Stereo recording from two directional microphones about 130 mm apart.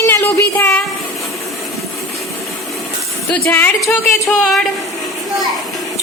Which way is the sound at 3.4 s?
15° left (ahead or behind).